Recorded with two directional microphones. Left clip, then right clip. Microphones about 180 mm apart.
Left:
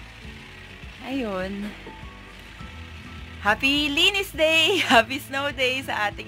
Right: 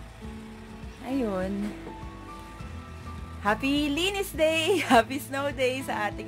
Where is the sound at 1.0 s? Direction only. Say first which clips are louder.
Left 1 dB; centre (ahead or behind).